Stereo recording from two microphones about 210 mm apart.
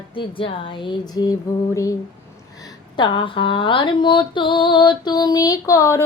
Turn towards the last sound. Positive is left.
turn(degrees=15)  # may be behind; listen again after turning